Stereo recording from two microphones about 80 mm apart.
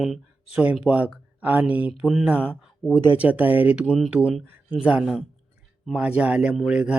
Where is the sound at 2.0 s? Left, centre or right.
Centre.